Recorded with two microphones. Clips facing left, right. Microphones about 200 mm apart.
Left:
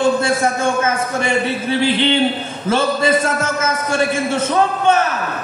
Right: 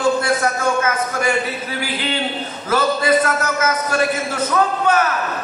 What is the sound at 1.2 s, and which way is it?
A man's voice, 25° left (ahead or behind).